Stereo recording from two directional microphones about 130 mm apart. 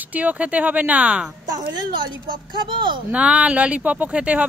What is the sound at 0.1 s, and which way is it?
Speech, 10° right (ahead or behind).